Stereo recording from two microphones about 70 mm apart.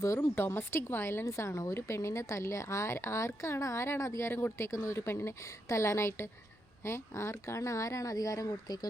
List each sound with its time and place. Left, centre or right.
0.0 s a woman's voice: left